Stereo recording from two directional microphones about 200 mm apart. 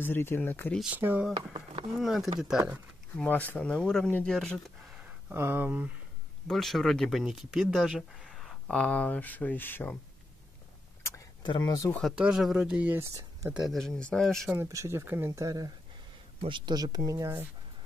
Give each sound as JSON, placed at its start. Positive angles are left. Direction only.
{"t": 0.0, "sound": "speech", "side_deg": 10}
{"t": 0.7, "sound": "speech", "side_deg": -5}
{"t": 1.5, "sound": "a sound", "side_deg": -25}
{"t": 2.0, "sound": "speech", "side_deg": 0}
{"t": 11.1, "sound": "a sound", "side_deg": 20}
{"t": 12.0, "sound": "speech", "side_deg": -5}
{"t": 13.6, "sound": "speech", "side_deg": 0}
{"t": 14.5, "sound": "speech", "side_deg": -15}